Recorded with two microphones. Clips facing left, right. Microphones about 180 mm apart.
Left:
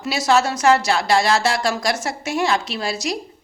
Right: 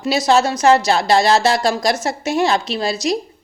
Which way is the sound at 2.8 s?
20° right (ahead or behind).